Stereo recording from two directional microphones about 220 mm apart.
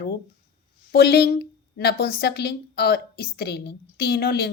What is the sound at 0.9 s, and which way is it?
A woman's voice, 45° left (ahead or behind).